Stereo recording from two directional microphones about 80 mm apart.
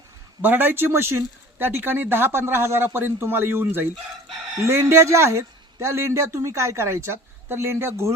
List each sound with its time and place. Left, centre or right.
0.4 s a man's voice: right